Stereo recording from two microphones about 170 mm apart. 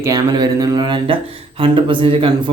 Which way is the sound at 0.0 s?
20° right (ahead or behind).